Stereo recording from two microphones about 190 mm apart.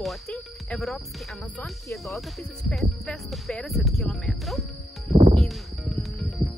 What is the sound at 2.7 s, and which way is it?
Speech, centre (ahead or behind).